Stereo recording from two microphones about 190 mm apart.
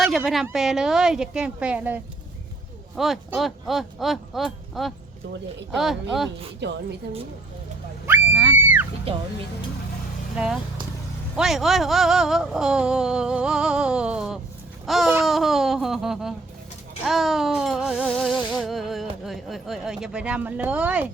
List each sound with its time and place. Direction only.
0.0 s a woman's voice: centre (ahead or behind)
0.4 s music: centre (ahead or behind)
2.9 s speech: centre (ahead or behind)
3.3 s music: centre (ahead or behind)
6.6 s a woman's voice: 65° right (ahead or behind)
8.0 s screaming: 10° right (ahead or behind)
10.3 s speech: 5° right (ahead or behind)
11.3 s music: centre (ahead or behind)
14.8 s babbling: centre (ahead or behind)
15.2 s music: centre (ahead or behind)